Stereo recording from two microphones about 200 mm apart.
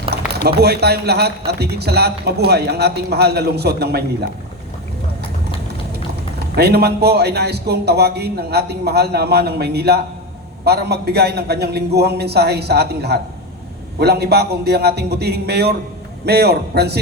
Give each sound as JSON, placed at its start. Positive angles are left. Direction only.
{"t": 0.1, "sound": "a sound", "side_deg": -55}
{"t": 0.4, "sound": "speech", "side_deg": -55}
{"t": 6.6, "sound": "a man's voice", "side_deg": -55}